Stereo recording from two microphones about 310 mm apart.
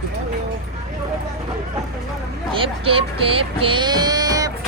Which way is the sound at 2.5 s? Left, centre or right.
Centre.